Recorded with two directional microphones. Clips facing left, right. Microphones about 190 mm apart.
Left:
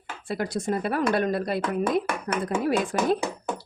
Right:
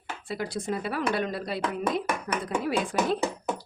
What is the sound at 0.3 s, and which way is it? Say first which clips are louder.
Speech: left 4 dB; 50° left (ahead or behind).